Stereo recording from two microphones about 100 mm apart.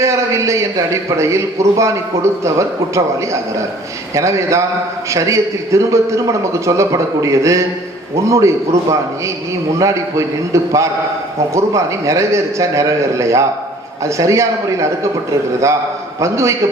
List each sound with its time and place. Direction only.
0.0 s a man's voice: 30° right (ahead or behind)
4.1 s a man's voice: 30° right (ahead or behind)
16.2 s a man's voice: 30° right (ahead or behind)